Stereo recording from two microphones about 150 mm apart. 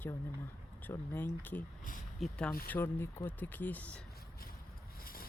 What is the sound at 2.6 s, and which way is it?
Speech, 15° left (ahead or behind).